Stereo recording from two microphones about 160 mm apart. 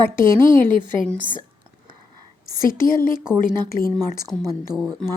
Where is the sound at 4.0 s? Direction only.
25° right (ahead or behind).